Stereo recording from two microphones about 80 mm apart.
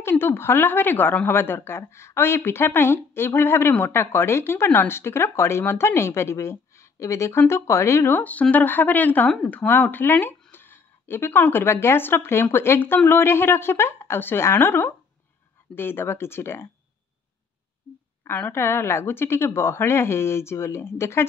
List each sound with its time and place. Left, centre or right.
0.0 s a woman's voice: left
8.2 s a woman's voice: centre
18.5 s a woman's voice: left